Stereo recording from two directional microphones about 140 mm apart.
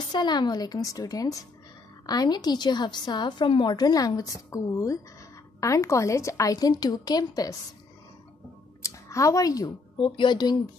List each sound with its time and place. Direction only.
0.1 s a woman's voice: 30° left (ahead or behind)
8.8 s speech: 25° left (ahead or behind)